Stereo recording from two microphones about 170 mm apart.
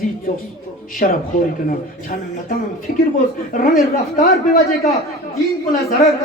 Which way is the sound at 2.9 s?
50° left (ahead or behind).